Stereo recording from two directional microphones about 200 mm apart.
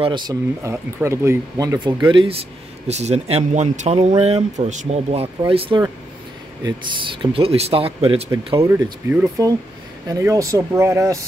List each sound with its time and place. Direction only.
0.0 s speech: 20° right (ahead or behind)
2.0 s speech: 25° right (ahead or behind)
8.5 s speech: 15° right (ahead or behind)